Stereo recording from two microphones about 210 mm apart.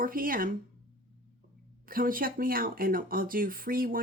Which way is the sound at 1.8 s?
40° right (ahead or behind).